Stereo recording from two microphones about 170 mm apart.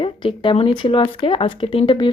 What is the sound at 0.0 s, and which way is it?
A woman's voice, 30° left (ahead or behind).